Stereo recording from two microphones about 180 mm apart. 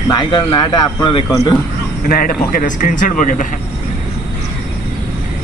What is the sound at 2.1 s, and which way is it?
Speech, 55° left (ahead or behind).